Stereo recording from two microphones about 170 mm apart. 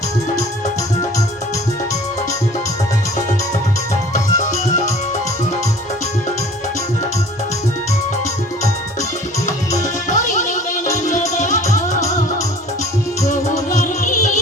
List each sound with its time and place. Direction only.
9.7 s music: 45° left (ahead or behind)
13.2 s music: 50° left (ahead or behind)